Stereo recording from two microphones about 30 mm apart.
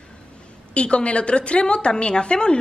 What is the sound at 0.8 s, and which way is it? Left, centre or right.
A woman's voice, left.